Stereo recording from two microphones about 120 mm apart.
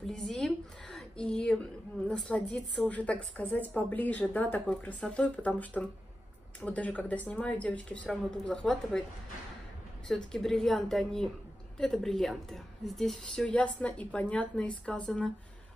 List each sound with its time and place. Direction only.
0.0 s a woman's voice: centre (ahead or behind)
10.0 s a woman's voice: 5° left (ahead or behind)